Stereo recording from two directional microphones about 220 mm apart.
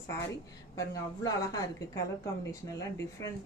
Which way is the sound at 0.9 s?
15° left (ahead or behind).